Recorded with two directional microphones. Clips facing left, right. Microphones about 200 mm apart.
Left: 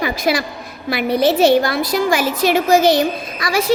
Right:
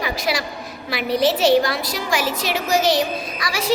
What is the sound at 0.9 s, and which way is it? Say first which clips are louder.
A woman's voice: left 4 dB; 55° left (ahead or behind).